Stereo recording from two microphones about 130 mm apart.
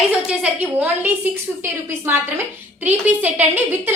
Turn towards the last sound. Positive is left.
turn(degrees=-15)  # may be behind; listen again after turning